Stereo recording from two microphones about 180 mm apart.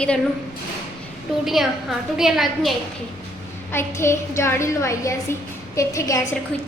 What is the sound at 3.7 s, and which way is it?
A woman's voice, 15° left (ahead or behind).